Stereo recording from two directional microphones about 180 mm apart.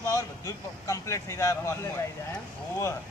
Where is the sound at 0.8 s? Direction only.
15° left (ahead or behind).